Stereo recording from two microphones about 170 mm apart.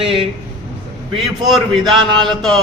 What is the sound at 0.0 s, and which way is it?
Speech, 30° right (ahead or behind).